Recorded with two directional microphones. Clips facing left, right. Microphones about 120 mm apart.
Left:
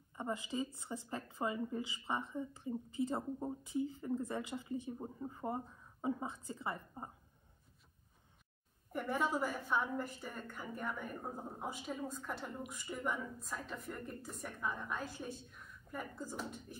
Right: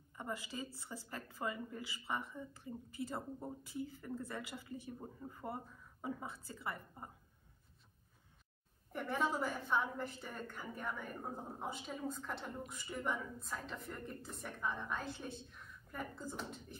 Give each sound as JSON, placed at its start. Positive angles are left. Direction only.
{"t": 0.1, "sound": "a woman's voice", "side_deg": 20}
{"t": 8.9, "sound": "a woman's voice", "side_deg": 0}